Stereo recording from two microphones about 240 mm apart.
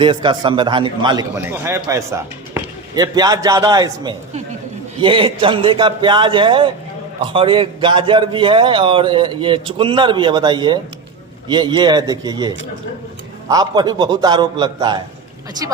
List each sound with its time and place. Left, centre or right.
0.0 s a man's voice: centre